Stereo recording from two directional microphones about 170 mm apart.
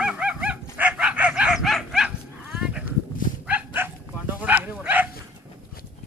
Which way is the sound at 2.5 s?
5° right (ahead or behind).